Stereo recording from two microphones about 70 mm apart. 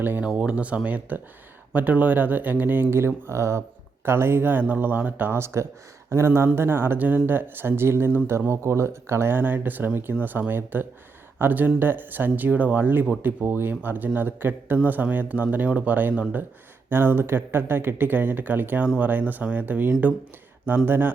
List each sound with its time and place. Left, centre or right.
0.0 s speech: right
0.3 s speech: centre